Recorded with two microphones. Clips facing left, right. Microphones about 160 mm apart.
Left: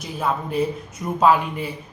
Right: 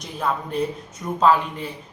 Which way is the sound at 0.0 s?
5° left (ahead or behind).